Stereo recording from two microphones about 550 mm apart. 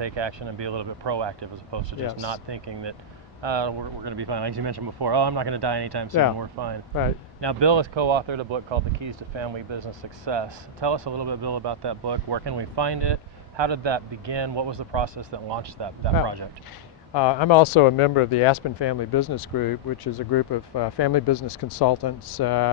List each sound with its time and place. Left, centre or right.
0.0 s speech: right
17.1 s speech: left